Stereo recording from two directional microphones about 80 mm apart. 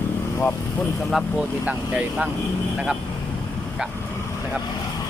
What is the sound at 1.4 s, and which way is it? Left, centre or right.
Speech, centre.